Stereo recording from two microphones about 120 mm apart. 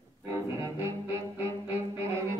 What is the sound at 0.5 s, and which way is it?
Music, 20° right (ahead or behind).